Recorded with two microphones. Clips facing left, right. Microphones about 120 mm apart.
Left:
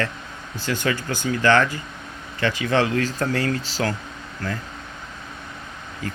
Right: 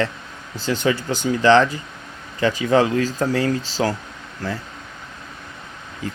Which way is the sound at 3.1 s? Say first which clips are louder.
Right 3 dB; 15° right (ahead or behind).